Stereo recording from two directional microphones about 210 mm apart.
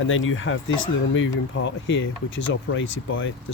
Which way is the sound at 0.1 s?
70° left (ahead or behind).